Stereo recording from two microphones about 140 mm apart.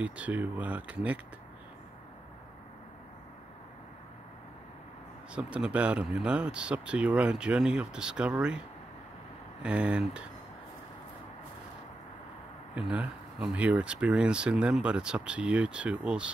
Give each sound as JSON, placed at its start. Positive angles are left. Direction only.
{"t": 0.0, "sound": "speech", "side_deg": -10}
{"t": 5.3, "sound": "speech", "side_deg": -10}
{"t": 12.7, "sound": "speech", "side_deg": -10}